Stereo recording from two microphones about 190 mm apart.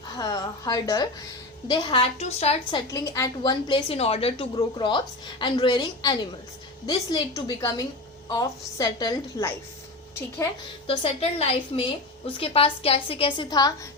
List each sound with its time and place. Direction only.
0.2 s a woman's voice: 20° left (ahead or behind)
2.8 s a woman's voice: 15° left (ahead or behind)
10.8 s a woman's voice: 30° left (ahead or behind)